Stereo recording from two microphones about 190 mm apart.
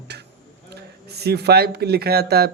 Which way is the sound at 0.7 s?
60° right (ahead or behind).